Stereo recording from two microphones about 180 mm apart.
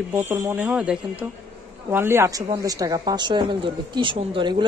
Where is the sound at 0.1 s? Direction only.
10° right (ahead or behind).